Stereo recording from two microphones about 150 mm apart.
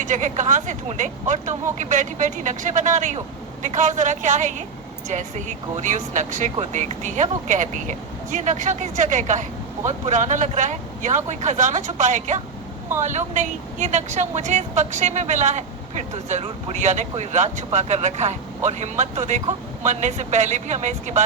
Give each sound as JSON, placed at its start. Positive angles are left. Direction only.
{"t": 0.0, "sound": "speech", "side_deg": -55}